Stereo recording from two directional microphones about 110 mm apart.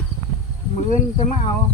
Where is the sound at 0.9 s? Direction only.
85° left.